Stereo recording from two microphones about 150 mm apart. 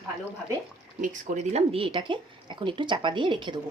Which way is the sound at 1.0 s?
55° right (ahead or behind).